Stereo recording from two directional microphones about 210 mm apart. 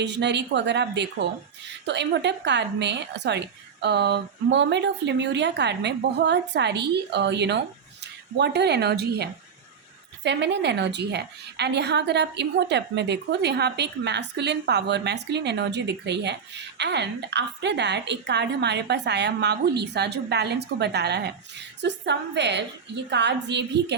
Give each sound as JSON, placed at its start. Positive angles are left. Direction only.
{"t": 0.0, "sound": "a woman's voice", "side_deg": -55}